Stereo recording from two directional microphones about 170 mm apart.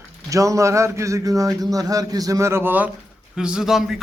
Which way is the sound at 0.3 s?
20° right (ahead or behind).